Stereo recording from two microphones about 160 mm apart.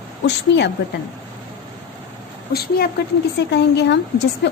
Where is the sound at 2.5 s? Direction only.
75° left (ahead or behind).